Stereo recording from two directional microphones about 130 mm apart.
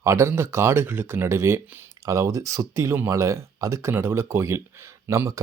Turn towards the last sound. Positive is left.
turn(degrees=-25)  # may be behind; listen again after turning